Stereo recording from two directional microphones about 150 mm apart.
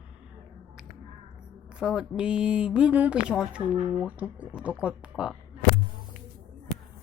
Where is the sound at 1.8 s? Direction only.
5° right (ahead or behind).